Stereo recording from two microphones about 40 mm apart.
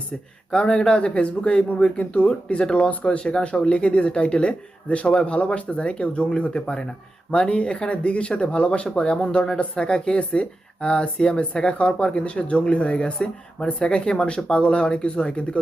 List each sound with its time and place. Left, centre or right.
0.5 s speech: left